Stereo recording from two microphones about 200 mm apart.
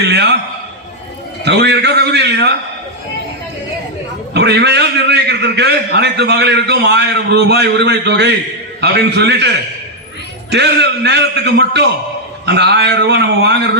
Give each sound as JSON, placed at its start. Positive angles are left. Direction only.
{"t": 0.0, "sound": "a sound", "side_deg": -55}
{"t": 1.5, "sound": "a man's voice", "side_deg": -60}
{"t": 4.4, "sound": "a man's voice", "side_deg": -55}
{"t": 10.5, "sound": "a man's voice", "side_deg": -60}